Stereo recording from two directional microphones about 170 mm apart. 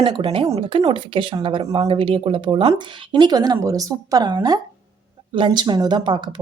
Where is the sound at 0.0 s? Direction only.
30° right (ahead or behind).